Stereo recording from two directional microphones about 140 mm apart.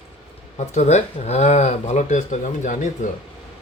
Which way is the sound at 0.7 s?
55° left (ahead or behind).